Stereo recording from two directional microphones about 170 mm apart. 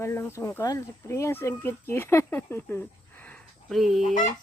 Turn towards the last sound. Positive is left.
turn(degrees=0)  # may be behind; listen again after turning